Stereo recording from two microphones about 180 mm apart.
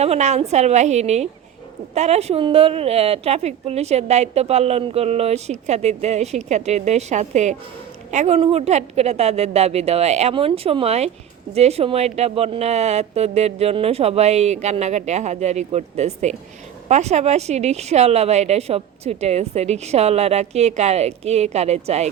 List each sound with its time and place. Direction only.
0.0 s a woman's voice: 40° right (ahead or behind)